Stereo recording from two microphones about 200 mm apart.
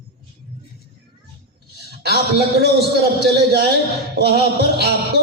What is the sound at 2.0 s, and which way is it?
A man's voice, 55° right (ahead or behind).